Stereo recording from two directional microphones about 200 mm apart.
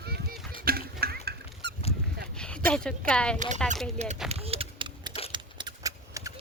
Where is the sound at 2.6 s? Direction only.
5° left (ahead or behind).